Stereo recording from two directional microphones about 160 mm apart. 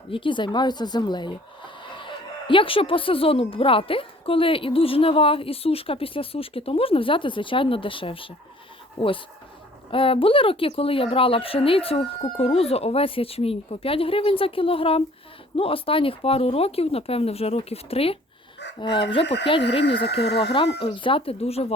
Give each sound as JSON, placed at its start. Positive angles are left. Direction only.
{"t": 0.1, "sound": "speech", "side_deg": 30}
{"t": 19.2, "sound": "speech", "side_deg": 90}
{"t": 20.8, "sound": "speech", "side_deg": 30}